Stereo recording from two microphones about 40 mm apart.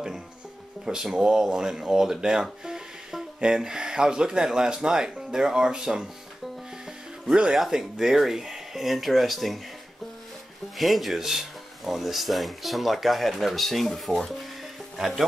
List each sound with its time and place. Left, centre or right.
0.8 s speech: centre
2.6 s music: centre
3.3 s speech: centre
7.2 s speech: centre
7.5 s speech: centre
10.8 s speech: centre